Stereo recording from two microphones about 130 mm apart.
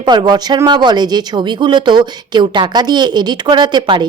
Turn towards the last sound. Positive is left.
turn(degrees=-35)  # may be behind; listen again after turning